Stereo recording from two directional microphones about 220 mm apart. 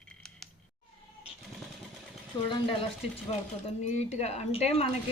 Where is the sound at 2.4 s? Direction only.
25° left (ahead or behind).